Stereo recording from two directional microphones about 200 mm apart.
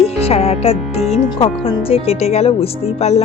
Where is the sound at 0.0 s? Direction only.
30° left (ahead or behind).